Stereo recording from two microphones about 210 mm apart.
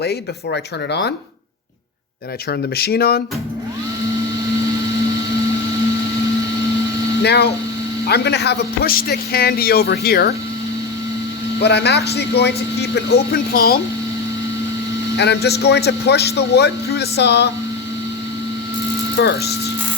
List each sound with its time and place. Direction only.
0.0 s a man's voice: 50° left (ahead or behind)
2.5 s a man's voice: 50° left (ahead or behind)
7.2 s a man's voice: 50° left (ahead or behind)
11.6 s a man's voice: 55° left (ahead or behind)
15.2 s a man's voice: 50° left (ahead or behind)
19.1 s a man's voice: 50° left (ahead or behind)